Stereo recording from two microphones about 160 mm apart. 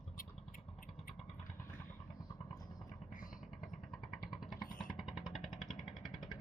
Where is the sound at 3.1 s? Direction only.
60° left (ahead or behind).